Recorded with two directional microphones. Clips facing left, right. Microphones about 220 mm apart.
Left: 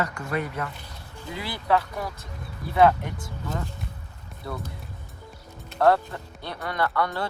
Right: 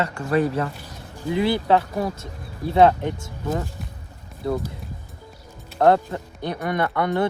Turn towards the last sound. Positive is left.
turn(degrees=-20)  # may be behind; listen again after turning